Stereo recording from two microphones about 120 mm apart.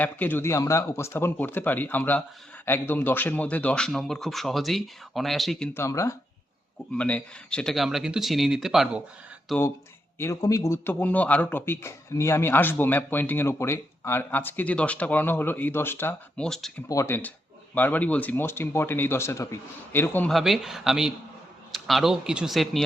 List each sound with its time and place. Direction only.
0.0 s a man's voice: 15° left (ahead or behind)
5.7 s speech: 25° left (ahead or behind)
6.9 s speech: 10° left (ahead or behind)
10.2 s a man's voice: 25° left (ahead or behind)
16.4 s speech: 5° left (ahead or behind)
16.9 s speech: 25° left (ahead or behind)
17.7 s a man's voice: 15° left (ahead or behind)
20.2 s speech: centre (ahead or behind)